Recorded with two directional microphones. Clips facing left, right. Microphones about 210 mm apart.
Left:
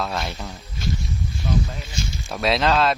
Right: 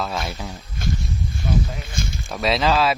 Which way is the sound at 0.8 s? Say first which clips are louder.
Right 1 dB; 50° right (ahead or behind).